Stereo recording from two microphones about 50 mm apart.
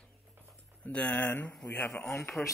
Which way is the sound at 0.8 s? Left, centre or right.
Left.